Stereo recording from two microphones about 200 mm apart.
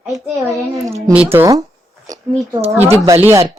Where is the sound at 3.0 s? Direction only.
10° right (ahead or behind).